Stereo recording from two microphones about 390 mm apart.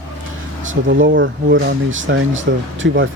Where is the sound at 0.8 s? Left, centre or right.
Right.